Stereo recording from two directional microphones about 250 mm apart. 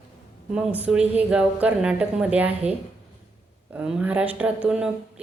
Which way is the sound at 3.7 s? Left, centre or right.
Centre.